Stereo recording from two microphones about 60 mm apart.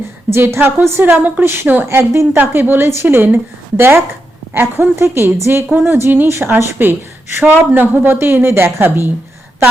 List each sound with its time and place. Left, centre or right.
0.3 s a woman's voice: right
1.2 s a woman's voice: right
7.4 s a woman's voice: right